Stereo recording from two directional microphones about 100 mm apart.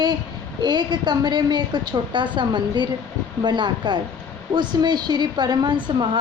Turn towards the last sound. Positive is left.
turn(degrees=-55)  # may be behind; listen again after turning